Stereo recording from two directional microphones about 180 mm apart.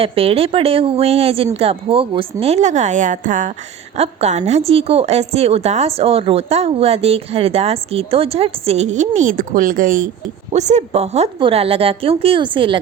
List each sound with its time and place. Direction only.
0.0 s a woman's voice: 30° right (ahead or behind)